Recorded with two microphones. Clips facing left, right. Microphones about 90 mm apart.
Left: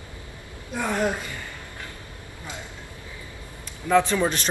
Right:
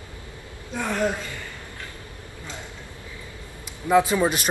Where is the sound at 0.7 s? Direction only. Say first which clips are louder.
Even; 15° left (ahead or behind).